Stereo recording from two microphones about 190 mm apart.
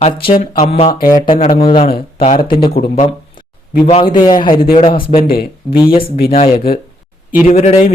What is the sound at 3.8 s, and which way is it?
Speech, 30° left (ahead or behind).